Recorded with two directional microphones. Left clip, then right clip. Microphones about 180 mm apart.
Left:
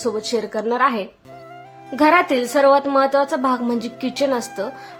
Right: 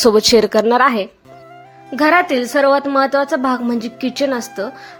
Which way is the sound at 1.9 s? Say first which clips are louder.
Right 2 dB; 15° right (ahead or behind).